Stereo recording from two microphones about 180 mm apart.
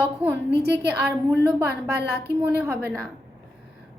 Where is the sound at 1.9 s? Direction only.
65° right (ahead or behind).